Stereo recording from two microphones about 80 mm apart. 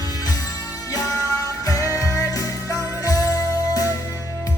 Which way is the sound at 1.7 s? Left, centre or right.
Left.